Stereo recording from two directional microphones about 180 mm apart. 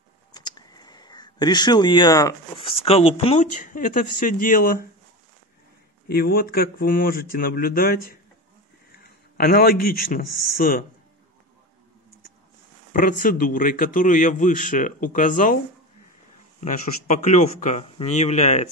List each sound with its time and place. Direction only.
0.3 s a sound: 20° left (ahead or behind)
2.6 s speech: 30° left (ahead or behind)
3.4 s a man's voice: 45° left (ahead or behind)
6.0 s a man's voice: 55° left (ahead or behind)
12.9 s a man's voice: 50° left (ahead or behind)
16.6 s speech: 45° left (ahead or behind)